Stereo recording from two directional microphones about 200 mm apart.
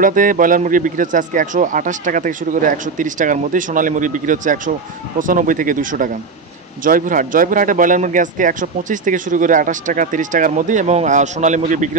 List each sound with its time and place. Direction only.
0.0 s speech: 40° right (ahead or behind)